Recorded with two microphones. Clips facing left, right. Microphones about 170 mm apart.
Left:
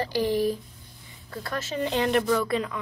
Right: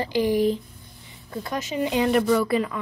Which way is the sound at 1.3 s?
15° right (ahead or behind).